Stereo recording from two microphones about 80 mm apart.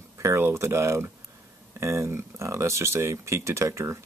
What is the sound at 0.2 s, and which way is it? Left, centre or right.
Speech, right.